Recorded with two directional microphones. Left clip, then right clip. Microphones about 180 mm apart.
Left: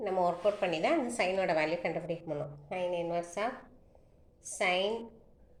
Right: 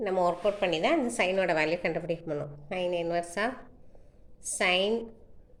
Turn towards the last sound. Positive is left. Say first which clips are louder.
# right 4 dB
turn(degrees=-50)  # may be behind; listen again after turning